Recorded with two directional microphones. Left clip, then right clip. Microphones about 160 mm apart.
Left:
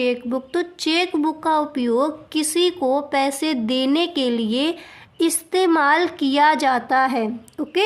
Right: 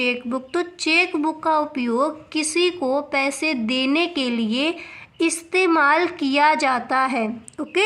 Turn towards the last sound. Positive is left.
turn(degrees=40)  # may be behind; listen again after turning